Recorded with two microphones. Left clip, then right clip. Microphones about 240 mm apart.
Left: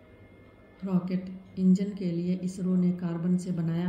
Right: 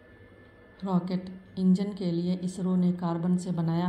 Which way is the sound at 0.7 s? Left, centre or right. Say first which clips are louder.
Right 2 dB; centre.